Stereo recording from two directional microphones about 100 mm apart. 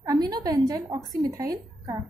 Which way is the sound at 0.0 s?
40° right (ahead or behind).